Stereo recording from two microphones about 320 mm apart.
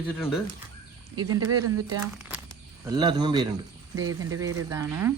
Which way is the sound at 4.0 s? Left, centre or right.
Right.